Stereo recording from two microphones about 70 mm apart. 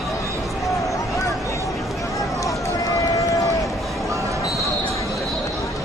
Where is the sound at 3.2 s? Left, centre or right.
Left.